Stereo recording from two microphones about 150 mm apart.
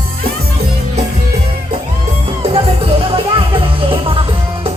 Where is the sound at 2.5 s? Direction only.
40° right (ahead or behind).